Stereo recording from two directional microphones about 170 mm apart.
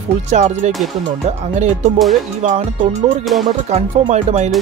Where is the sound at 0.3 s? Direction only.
40° right (ahead or behind).